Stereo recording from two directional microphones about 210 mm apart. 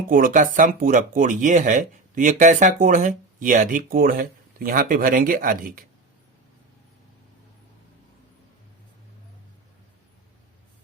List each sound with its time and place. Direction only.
0.1 s speech: 40° right (ahead or behind)